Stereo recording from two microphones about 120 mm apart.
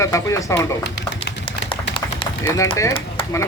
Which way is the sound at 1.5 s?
50° left (ahead or behind).